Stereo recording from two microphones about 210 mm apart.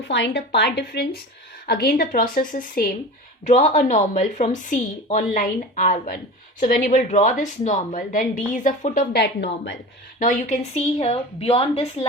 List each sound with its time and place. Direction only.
0.0 s a woman's voice: 55° left (ahead or behind); by 9.0 s 35° left (ahead or behind)
9.1 s a woman's voice: 55° left (ahead or behind)
10.2 s a woman's voice: 35° left (ahead or behind)